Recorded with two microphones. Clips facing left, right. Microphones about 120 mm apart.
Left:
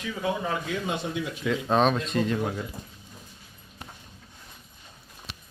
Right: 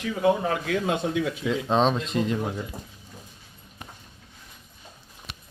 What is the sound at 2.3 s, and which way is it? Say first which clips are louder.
Speech: even; 5° right (ahead or behind).